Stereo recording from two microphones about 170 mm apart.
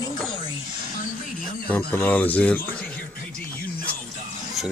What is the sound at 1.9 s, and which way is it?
Speech, 10° left (ahead or behind).